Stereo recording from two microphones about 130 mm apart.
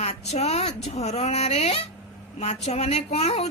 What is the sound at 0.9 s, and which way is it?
Speech, 55° left (ahead or behind).